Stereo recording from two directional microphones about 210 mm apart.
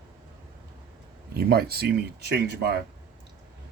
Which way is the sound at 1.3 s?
45° right (ahead or behind).